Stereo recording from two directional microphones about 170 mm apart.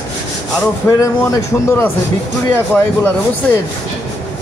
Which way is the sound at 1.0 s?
20° left (ahead or behind).